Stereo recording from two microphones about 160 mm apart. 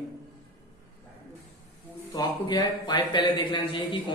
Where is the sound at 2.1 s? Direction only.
25° left (ahead or behind).